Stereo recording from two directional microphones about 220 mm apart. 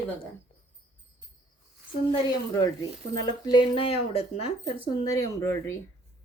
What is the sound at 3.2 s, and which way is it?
Speech, 20° left (ahead or behind).